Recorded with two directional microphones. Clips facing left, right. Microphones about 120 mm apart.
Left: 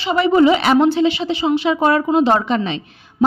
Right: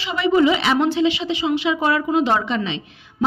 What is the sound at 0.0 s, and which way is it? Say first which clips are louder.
A woman's voice: left 4 dB; 40° left (ahead or behind).